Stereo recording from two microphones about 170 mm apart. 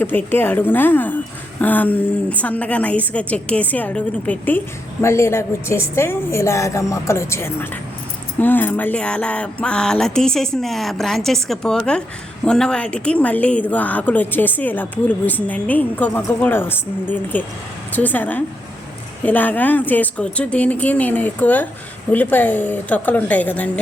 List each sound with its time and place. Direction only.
0.0 s a woman's voice: 10° left (ahead or behind)